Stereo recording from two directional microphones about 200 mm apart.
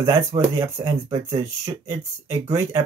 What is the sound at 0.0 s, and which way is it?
Speech, 15° right (ahead or behind).